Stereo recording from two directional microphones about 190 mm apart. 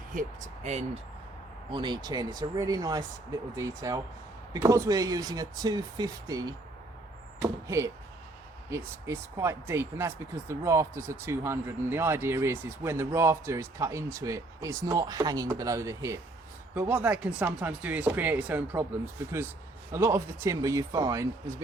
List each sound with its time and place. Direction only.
0.1 s speech: 40° right (ahead or behind)
1.7 s speech: 25° right (ahead or behind)